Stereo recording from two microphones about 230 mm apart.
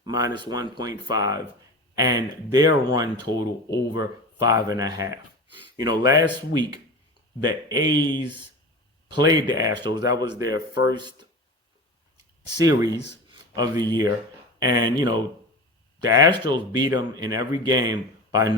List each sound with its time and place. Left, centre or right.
0.0 s speech: centre
9.0 s speech: centre
12.5 s speech: centre